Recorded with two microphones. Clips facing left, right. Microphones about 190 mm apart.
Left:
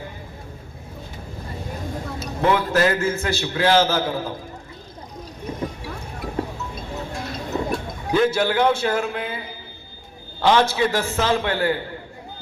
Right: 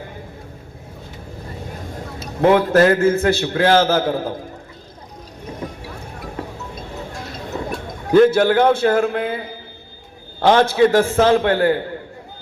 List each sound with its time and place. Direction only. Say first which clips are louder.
2.4 s a man's voice: right 6 dB; 55° right (ahead or behind)
8.1 s a man's voice: right 7 dB; 50° right (ahead or behind)